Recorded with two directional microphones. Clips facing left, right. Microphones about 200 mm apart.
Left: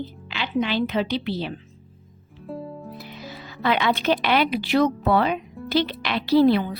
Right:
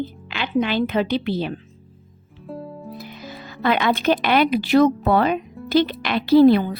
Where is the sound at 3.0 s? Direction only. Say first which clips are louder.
Right 2 dB; 50° right (ahead or behind).